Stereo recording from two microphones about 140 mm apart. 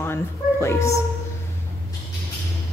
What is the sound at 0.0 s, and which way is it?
Speech, 20° left (ahead or behind).